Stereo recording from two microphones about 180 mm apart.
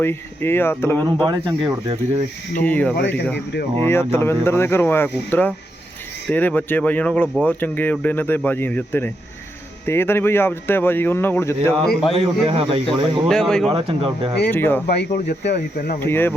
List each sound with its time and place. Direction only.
0.0 s speech: 15° left (ahead or behind)
1.0 s speech: 20° right (ahead or behind)
2.6 s speech: 10° left (ahead or behind)
2.9 s speech: 80° left
3.3 s speech: 65° left (ahead or behind)
3.8 s speech: 15° left (ahead or behind)
12.1 s speech: 30° right (ahead or behind)
13.2 s speech: 5° left (ahead or behind)
13.7 s speech: 30° right (ahead or behind)
14.5 s speech: 10° left (ahead or behind)
14.8 s speech: 60° left (ahead or behind)
16.0 s speech: 10° left (ahead or behind)